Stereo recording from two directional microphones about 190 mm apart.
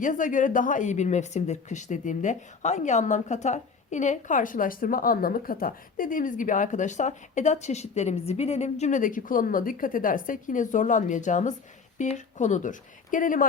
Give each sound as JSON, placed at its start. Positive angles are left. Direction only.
{"t": 0.0, "sound": "a woman's voice", "side_deg": 45}